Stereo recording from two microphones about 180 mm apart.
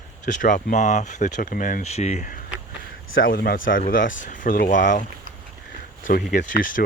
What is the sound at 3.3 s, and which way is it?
Speech, 55° left (ahead or behind).